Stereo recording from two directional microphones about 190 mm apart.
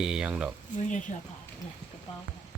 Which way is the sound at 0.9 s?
40° left (ahead or behind).